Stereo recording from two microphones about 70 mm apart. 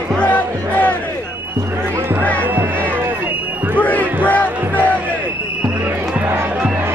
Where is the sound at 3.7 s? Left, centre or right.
Left.